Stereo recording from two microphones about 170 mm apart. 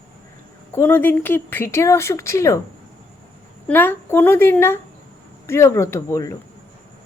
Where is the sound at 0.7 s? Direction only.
15° left (ahead or behind).